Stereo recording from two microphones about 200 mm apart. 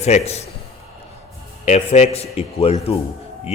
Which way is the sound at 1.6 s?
35° left (ahead or behind).